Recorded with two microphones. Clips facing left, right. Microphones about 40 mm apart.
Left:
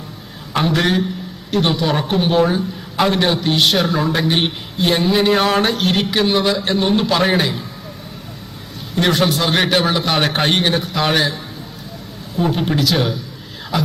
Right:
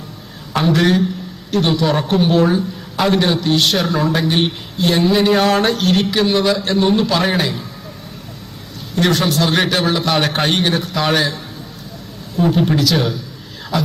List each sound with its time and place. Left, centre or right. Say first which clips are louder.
0.5 s speech: right 2 dB; centre
4.2 s speech: right 1 dB; centre
4.9 s speech: right 2 dB; centre
9.0 s speech: even; centre
12.4 s speech: right 3 dB; centre